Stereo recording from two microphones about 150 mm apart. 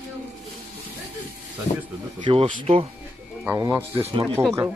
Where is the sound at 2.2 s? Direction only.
35° right (ahead or behind).